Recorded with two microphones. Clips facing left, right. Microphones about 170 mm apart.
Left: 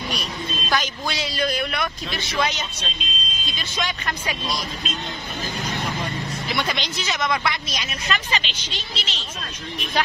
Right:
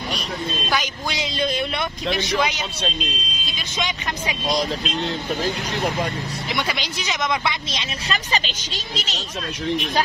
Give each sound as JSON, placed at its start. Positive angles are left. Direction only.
{"t": 0.7, "sound": "a man's voice", "side_deg": -15}
{"t": 2.1, "sound": "speech", "side_deg": -15}
{"t": 3.7, "sound": "a man's voice", "side_deg": -20}
{"t": 6.5, "sound": "speech", "side_deg": -10}
{"t": 8.3, "sound": "speech", "side_deg": -40}